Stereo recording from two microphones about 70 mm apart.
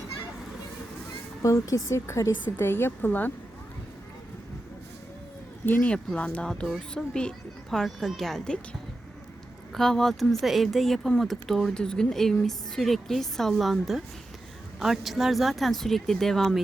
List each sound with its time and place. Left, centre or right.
1.4 s a woman's voice: left
2.6 s speech: left
6.1 s speech: centre
9.7 s speech: centre